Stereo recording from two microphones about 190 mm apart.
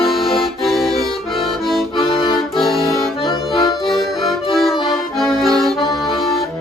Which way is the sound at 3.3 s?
25° left (ahead or behind).